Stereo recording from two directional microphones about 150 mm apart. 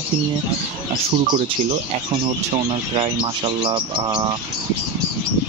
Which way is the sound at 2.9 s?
35° right (ahead or behind).